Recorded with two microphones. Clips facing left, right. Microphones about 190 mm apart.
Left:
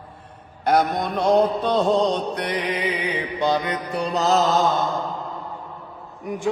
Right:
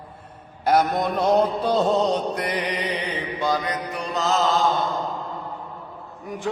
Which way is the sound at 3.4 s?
25° left (ahead or behind).